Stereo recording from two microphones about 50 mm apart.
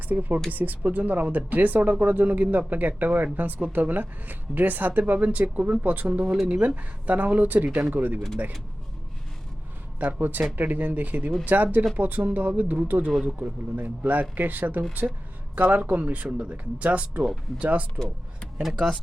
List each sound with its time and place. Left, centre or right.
0.1 s a woman's voice: right
10.0 s a woman's voice: right
18.6 s speech: centre